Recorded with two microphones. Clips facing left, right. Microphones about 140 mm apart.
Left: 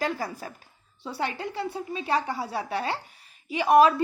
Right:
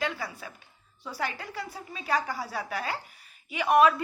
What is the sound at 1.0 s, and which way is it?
A woman's voice, 30° left (ahead or behind).